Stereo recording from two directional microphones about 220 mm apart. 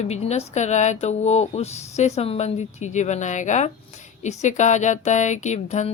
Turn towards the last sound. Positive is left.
turn(degrees=30)  # may be behind; listen again after turning